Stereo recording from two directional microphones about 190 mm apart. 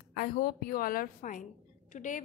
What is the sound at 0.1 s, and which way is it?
A woman's voice, 50° left (ahead or behind).